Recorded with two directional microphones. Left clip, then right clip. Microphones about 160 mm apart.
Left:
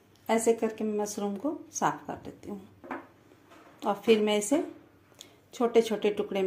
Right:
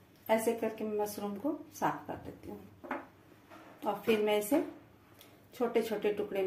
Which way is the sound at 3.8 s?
55° left (ahead or behind).